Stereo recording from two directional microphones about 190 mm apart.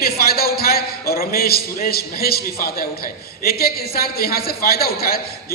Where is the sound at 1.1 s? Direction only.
50° left (ahead or behind).